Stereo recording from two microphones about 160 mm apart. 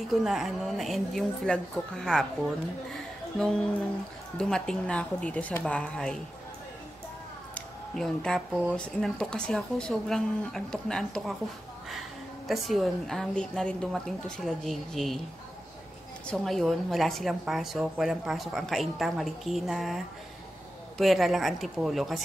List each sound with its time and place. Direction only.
0.1 s a woman's voice: centre (ahead or behind)
7.5 s a sound: 5° left (ahead or behind)
8.7 s a woman's voice: 5° left (ahead or behind)
12.4 s a woman's voice: centre (ahead or behind)
16.3 s a woman's voice: centre (ahead or behind)
21.0 s a woman's voice: centre (ahead or behind)